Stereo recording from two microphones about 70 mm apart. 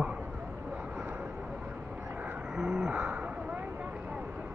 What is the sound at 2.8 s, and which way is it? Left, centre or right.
Owl, right.